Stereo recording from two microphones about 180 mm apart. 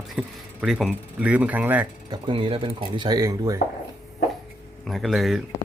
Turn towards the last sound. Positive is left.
turn(degrees=0)  # may be behind; listen again after turning